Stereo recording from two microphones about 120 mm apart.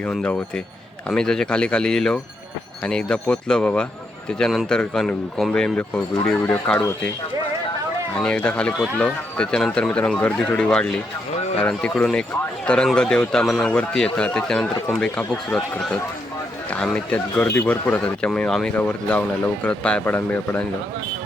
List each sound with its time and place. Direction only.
0.0 s speech: 10° left (ahead or behind)
6.7 s speech: 25° left (ahead or behind)
8.2 s speech: 10° left (ahead or behind)